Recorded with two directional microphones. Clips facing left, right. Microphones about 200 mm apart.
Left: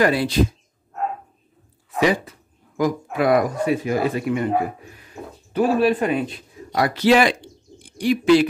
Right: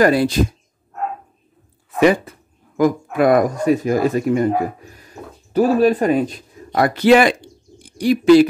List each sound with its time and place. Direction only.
0.0 s speech: 45° right (ahead or behind)
2.0 s speech: 55° right (ahead or behind)
7.8 s speech: 40° right (ahead or behind)